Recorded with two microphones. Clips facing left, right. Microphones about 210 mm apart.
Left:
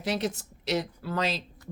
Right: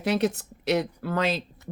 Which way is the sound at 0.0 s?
60° right (ahead or behind).